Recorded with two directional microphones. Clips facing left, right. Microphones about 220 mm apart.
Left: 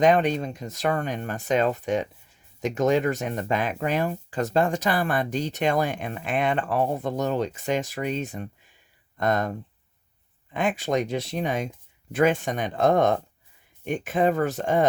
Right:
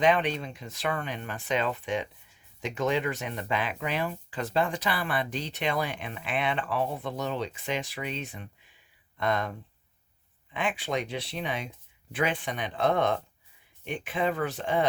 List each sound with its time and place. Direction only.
0.0 s speech: 45° left (ahead or behind)